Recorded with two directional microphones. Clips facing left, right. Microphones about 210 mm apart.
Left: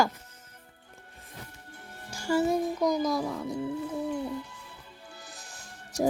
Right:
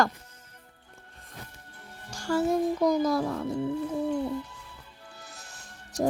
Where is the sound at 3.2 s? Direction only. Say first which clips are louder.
Right 2 dB; 5° left (ahead or behind).